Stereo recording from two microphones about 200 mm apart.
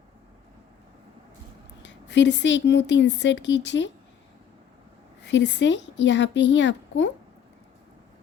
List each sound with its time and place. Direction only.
1.8 s speech: 65° left (ahead or behind)
5.2 s speech: 60° left (ahead or behind)